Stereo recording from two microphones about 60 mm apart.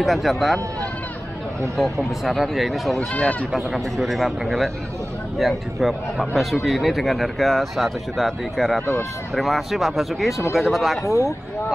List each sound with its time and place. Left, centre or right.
0.0 s speech: centre
1.8 s speech: centre
3.0 s speech: centre
3.5 s speech: centre
11.1 s speech: left